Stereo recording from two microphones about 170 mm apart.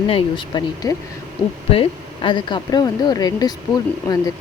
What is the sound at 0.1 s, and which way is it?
Speech, 25° left (ahead or behind).